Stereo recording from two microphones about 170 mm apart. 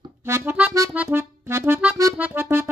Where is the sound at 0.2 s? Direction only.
15° right (ahead or behind).